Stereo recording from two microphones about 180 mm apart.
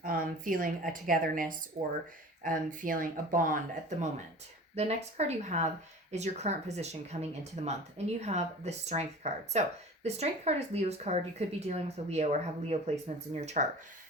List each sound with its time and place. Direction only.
0.0 s a woman's voice: 50° right (ahead or behind)